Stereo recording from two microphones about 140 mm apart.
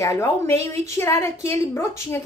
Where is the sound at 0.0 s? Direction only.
20° left (ahead or behind).